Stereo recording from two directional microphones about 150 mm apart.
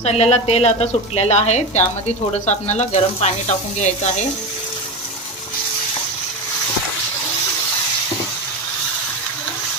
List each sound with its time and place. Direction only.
0.0 s speech: 45° left (ahead or behind)